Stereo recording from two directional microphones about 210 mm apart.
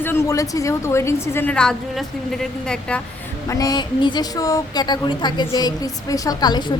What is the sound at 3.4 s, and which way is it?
A woman's voice, 15° left (ahead or behind).